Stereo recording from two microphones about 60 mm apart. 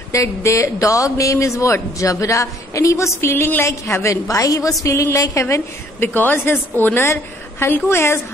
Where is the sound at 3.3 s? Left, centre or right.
Left.